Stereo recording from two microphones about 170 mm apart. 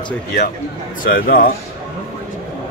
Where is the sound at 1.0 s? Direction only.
60° left (ahead or behind).